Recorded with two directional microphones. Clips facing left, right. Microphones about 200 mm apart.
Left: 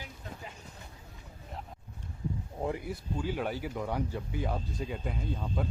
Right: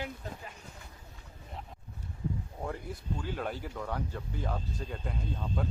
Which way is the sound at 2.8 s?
5° left (ahead or behind).